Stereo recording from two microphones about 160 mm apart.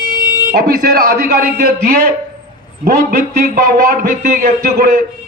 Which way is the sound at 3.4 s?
70° right (ahead or behind).